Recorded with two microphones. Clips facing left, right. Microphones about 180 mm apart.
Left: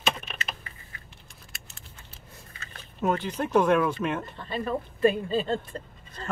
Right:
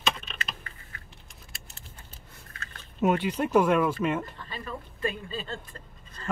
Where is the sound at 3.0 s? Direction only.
10° right (ahead or behind).